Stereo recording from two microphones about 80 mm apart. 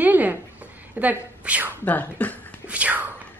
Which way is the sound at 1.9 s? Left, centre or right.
Centre.